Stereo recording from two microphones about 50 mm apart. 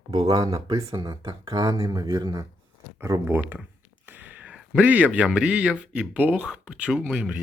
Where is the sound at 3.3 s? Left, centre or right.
Right.